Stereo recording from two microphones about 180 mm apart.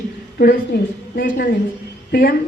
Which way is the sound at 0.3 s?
60° left (ahead or behind).